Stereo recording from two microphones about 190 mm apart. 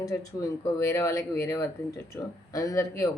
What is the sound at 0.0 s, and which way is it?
Speech, 15° left (ahead or behind).